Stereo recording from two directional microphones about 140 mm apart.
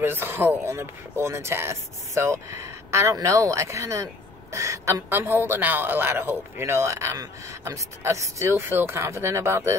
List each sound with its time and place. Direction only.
0.0 s speech: 15° right (ahead or behind)